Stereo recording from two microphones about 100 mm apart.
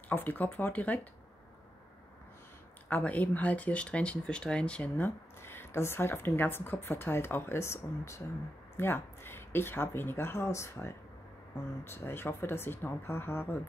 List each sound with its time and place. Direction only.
0.1 s speech: 20° left (ahead or behind)
2.9 s speech: 15° left (ahead or behind)